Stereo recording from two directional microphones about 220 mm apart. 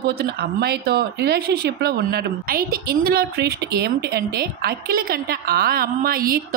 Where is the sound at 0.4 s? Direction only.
45° right (ahead or behind).